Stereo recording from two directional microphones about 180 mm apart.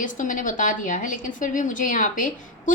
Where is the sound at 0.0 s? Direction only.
45° left (ahead or behind).